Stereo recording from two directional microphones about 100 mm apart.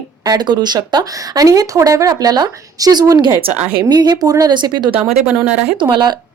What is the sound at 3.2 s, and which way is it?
Speech, 65° right (ahead or behind).